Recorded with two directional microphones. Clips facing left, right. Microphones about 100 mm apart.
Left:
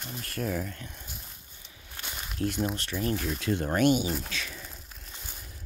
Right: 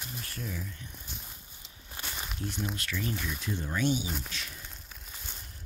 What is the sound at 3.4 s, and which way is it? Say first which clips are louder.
Speech: left 7 dB; 70° left (ahead or behind).